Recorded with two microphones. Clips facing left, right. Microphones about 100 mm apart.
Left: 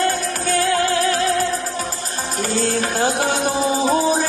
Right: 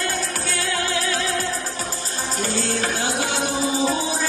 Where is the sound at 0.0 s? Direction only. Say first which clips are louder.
Left 6 dB; 40° left (ahead or behind).